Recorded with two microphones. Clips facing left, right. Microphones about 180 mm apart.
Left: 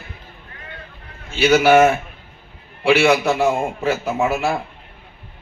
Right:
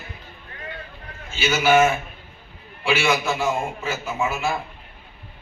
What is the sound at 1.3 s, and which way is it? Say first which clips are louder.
A man's voice: left 6 dB; 65° left (ahead or behind).